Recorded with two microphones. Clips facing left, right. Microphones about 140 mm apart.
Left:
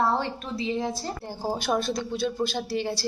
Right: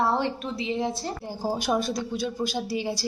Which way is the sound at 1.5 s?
10° right (ahead or behind).